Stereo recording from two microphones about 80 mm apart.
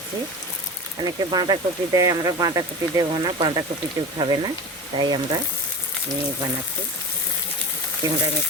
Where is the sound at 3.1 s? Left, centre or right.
Right.